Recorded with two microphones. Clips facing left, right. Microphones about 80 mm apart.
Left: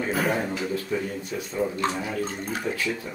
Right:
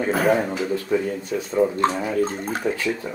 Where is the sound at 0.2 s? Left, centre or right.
Right.